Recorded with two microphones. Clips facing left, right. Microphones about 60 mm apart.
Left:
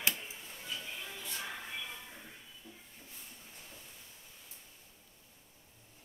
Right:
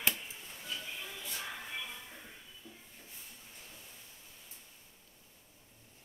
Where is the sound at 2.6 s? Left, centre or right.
Left.